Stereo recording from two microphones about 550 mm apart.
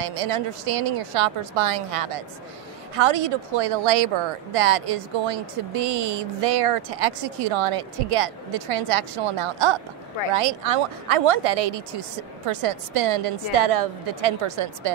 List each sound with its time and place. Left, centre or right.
0.0 s speech: right
12.4 s speech: right